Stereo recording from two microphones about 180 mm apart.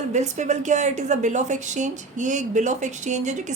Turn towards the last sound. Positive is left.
turn(degrees=-40)  # may be behind; listen again after turning